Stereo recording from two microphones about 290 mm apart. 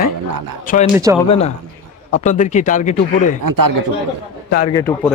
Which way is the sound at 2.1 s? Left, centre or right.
Left.